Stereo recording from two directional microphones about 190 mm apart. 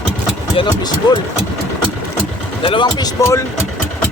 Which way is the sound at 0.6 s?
20° left (ahead or behind).